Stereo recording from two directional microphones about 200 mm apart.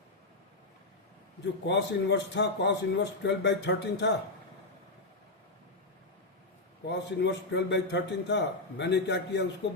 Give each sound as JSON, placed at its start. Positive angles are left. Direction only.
{"t": 1.6, "sound": "a man's voice", "side_deg": 60}
{"t": 6.8, "sound": "a man's voice", "side_deg": 60}